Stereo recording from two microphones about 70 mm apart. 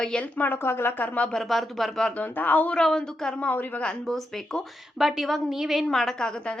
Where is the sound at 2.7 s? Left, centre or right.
Centre.